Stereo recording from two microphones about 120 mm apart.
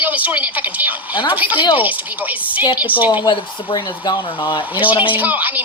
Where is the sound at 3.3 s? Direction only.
35° left (ahead or behind).